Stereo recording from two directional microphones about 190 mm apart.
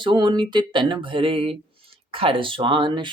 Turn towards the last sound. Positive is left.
turn(degrees=-25)  # may be behind; listen again after turning